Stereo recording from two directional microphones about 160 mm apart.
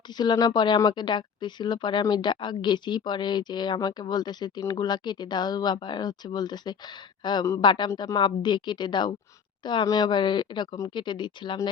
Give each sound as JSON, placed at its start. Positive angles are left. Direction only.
{"t": 0.2, "sound": "speech", "side_deg": 25}